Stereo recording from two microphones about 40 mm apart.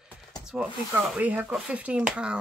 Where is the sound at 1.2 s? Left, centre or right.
Right.